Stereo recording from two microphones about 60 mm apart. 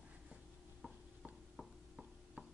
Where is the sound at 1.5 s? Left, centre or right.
Centre.